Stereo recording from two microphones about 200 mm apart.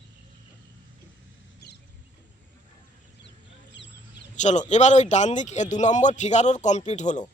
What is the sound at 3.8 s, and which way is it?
Chicken, 60° left (ahead or behind).